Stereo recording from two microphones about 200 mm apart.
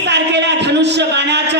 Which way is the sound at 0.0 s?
60° right (ahead or behind).